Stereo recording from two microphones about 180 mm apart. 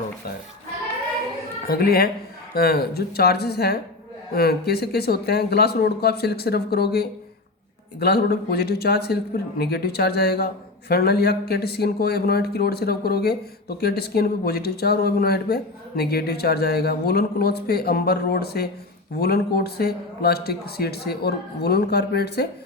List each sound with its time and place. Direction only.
1.6 s a man's voice: 55° left (ahead or behind)